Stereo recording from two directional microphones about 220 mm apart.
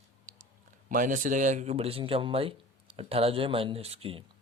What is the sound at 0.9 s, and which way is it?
A man's voice, 35° right (ahead or behind).